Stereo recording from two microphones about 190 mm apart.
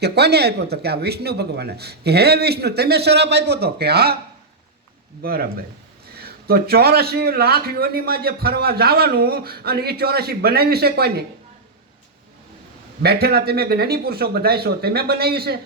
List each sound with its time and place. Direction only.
0.0 s a man's voice: 60° right (ahead or behind)
5.2 s a man's voice: 55° right (ahead or behind)
13.0 s a man's voice: 55° right (ahead or behind)